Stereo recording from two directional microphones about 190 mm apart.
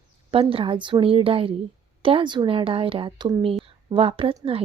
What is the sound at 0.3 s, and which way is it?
A woman's voice, 30° right (ahead or behind).